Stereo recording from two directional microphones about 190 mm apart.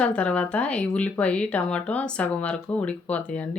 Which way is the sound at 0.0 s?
5° left (ahead or behind).